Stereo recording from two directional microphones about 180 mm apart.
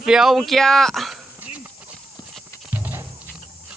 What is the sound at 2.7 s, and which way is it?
Wild animals, 10° right (ahead or behind).